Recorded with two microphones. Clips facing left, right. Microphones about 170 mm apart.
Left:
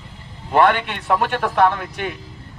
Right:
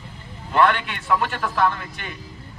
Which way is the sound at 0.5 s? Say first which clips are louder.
Left 3 dB; 60° left (ahead or behind).